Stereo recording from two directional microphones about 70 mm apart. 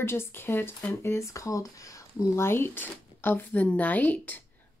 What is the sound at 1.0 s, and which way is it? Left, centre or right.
Speech, left.